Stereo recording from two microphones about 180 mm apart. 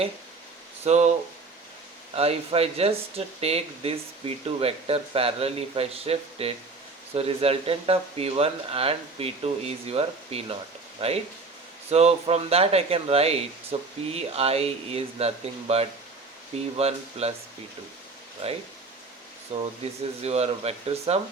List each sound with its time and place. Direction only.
0.9 s speech: 40° right (ahead or behind)
2.1 s speech: 35° right (ahead or behind)
18.4 s speech: 35° right (ahead or behind)
19.8 s speech: 35° right (ahead or behind)